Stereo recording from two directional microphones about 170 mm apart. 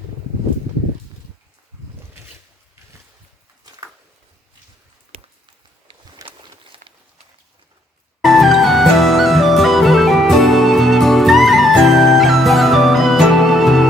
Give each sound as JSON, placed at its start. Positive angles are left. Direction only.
{"t": 6.2, "sound": "walk", "side_deg": -30}
{"t": 8.2, "sound": "music", "side_deg": 0}